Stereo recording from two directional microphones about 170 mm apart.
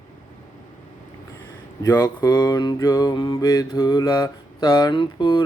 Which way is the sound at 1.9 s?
25° left (ahead or behind).